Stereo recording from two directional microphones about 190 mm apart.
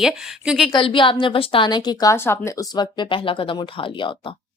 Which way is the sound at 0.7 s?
25° left (ahead or behind).